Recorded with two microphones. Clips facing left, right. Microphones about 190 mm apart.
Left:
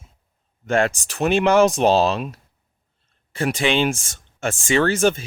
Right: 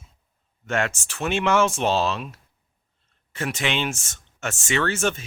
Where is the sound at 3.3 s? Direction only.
30° left (ahead or behind).